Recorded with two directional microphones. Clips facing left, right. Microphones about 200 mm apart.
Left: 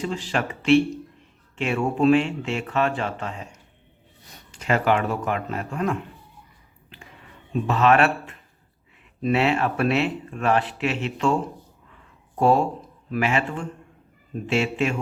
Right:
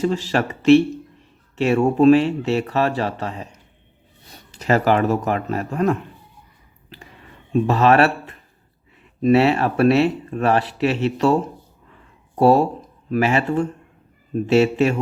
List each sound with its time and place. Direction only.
0.0 s speech: 40° right (ahead or behind)
4.5 s speech: 40° right (ahead or behind)
7.7 s speech: 35° right (ahead or behind)
12.4 s speech: 40° right (ahead or behind)